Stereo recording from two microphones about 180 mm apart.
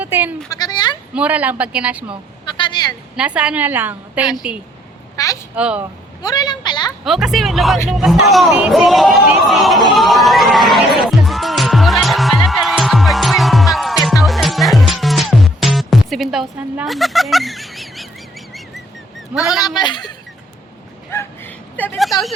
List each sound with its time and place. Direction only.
0.0 s speech: 10° right (ahead or behind)
0.5 s a sound: 20° left (ahead or behind)
1.1 s a man's voice: 10° right (ahead or behind)
2.6 s a sound: 25° left (ahead or behind)
3.2 s a man's voice: 5° right (ahead or behind)
4.2 s a child's voice: 25° left (ahead or behind)
5.5 s a man's voice: 5° right (ahead or behind)
6.2 s a woman's voice: 20° left (ahead or behind)
7.0 s speech: centre (ahead or behind)
7.9 s chatter: centre (ahead or behind)
14.2 s music: centre (ahead or behind)
19.3 s a man's voice: 5° right (ahead or behind)
19.6 s speech: 25° left (ahead or behind)
21.1 s a sound: 10° left (ahead or behind)